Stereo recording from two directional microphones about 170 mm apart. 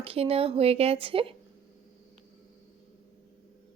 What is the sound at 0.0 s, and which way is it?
Speech, 35° right (ahead or behind).